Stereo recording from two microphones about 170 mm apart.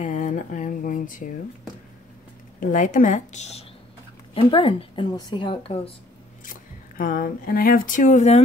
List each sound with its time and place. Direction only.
0.0 s a sound: 45° left (ahead or behind)
2.6 s a woman's voice: 50° left (ahead or behind)
4.3 s speech: 30° left (ahead or behind)
6.4 s speech: 55° left (ahead or behind)